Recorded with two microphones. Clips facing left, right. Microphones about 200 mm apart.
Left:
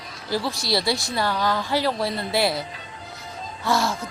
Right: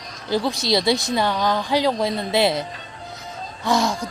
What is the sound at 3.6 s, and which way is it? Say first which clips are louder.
Speech: right 3 dB; 15° right (ahead or behind).